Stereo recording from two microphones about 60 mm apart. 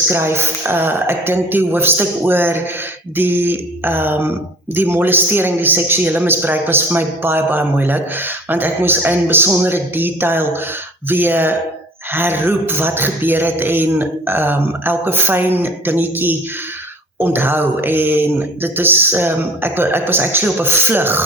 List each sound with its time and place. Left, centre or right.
0.1 s a man's voice: right